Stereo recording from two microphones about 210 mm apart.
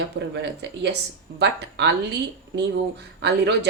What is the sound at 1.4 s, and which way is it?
Speech, 55° right (ahead or behind).